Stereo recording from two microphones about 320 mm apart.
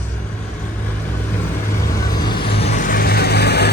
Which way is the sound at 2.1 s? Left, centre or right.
Centre.